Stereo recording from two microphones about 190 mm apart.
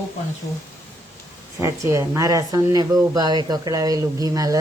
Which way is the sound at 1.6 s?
15° right (ahead or behind).